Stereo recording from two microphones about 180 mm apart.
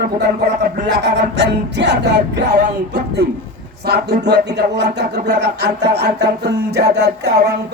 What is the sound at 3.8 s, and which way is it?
Speech, 65° right (ahead or behind).